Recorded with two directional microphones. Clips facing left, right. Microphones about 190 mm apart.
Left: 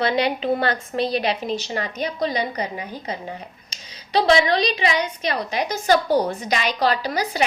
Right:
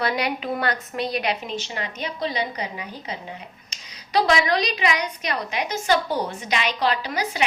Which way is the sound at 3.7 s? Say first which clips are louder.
Left 1 dB; 25° left (ahead or behind).